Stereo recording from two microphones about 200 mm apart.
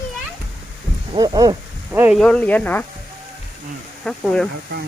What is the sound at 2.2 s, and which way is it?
Speech, 5° left (ahead or behind).